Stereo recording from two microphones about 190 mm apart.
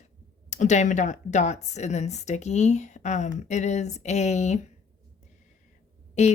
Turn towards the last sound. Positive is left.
turn(degrees=35)  # may be behind; listen again after turning